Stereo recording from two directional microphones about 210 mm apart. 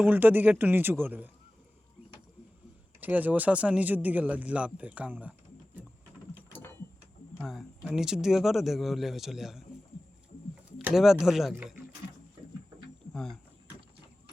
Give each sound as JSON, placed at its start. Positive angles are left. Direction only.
{"t": 0.0, "sound": "speech", "side_deg": -10}
{"t": 3.0, "sound": "speech", "side_deg": -10}
{"t": 7.3, "sound": "speech", "side_deg": 0}
{"t": 10.7, "sound": "speech", "side_deg": -5}
{"t": 13.1, "sound": "speech", "side_deg": 0}